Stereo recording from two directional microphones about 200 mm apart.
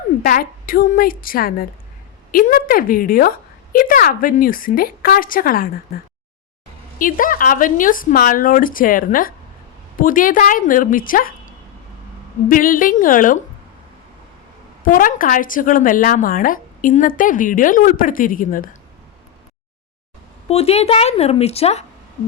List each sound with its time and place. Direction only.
0.2 s a woman's voice: 45° left (ahead or behind)
7.0 s a woman's voice: 45° left (ahead or behind)
12.5 s a woman's voice: 45° left (ahead or behind)
14.8 s a woman's voice: 45° left (ahead or behind)
20.5 s a woman's voice: 30° left (ahead or behind)